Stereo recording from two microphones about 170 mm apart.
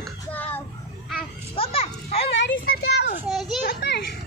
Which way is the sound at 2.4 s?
75° left (ahead or behind).